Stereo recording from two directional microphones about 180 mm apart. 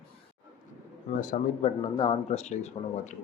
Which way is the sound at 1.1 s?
40° left (ahead or behind).